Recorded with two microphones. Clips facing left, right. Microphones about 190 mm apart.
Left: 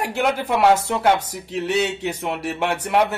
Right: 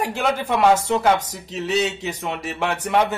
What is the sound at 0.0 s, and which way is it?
A man's voice, 10° left (ahead or behind).